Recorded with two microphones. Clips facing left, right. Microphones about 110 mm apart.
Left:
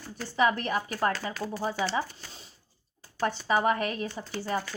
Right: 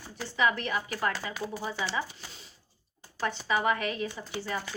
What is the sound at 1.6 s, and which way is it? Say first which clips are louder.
Speech: left 5 dB; 40° left (ahead or behind).